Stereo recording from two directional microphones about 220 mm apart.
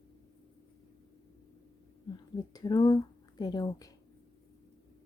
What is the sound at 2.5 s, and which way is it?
Speech, 15° left (ahead or behind).